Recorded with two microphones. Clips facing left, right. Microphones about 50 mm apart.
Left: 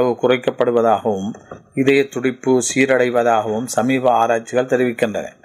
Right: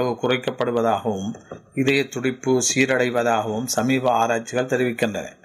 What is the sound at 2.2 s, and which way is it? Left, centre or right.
Speech, centre.